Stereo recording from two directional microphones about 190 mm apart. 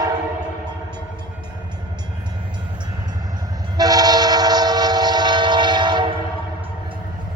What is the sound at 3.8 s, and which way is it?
Train, 20° right (ahead or behind).